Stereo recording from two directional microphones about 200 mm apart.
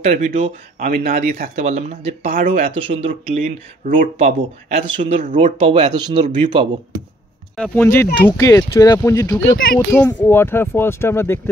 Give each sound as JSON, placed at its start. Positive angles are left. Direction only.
{"t": 0.0, "sound": "speech", "side_deg": -35}
{"t": 3.1, "sound": "speech", "side_deg": -40}
{"t": 4.8, "sound": "speech", "side_deg": -25}
{"t": 7.5, "sound": "speech", "side_deg": 5}